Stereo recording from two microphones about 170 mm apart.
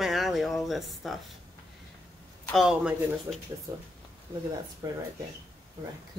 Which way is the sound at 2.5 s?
Centre (ahead or behind).